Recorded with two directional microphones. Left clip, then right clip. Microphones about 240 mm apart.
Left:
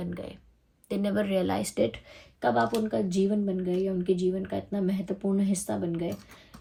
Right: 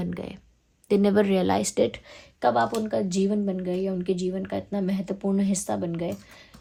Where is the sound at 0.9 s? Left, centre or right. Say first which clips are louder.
Right 8 dB; right.